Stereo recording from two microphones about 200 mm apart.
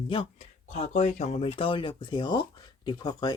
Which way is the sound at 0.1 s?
30° left (ahead or behind).